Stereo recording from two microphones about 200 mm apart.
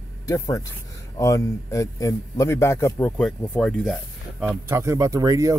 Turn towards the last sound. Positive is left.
turn(degrees=-15)  # may be behind; listen again after turning